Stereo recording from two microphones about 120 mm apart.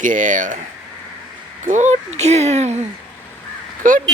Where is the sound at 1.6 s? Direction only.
90° right; by 2.7 s 70° right (ahead or behind).